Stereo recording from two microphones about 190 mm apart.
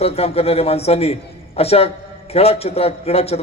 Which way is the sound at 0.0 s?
30° left (ahead or behind).